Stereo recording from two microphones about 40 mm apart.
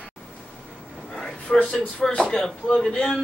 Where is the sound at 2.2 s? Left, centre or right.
Centre.